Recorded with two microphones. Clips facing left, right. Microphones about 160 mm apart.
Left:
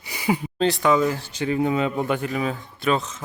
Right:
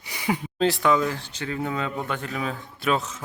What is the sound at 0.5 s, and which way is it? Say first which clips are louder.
Speech: left 1 dB; centre (ahead or behind).